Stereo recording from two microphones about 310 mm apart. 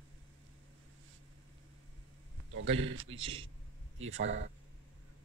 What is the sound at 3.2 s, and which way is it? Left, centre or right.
Speech, centre.